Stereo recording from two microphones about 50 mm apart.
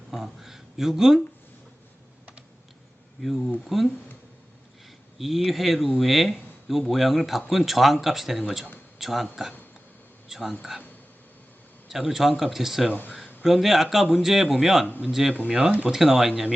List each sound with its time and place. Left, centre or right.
0.1 s speech: centre
3.2 s speech: centre
5.1 s speech: centre
11.9 s a man's voice: centre
14.8 s speech: left
15.4 s speech: centre